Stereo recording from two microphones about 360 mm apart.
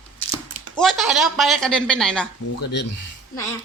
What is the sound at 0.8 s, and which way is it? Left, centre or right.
Speech, centre.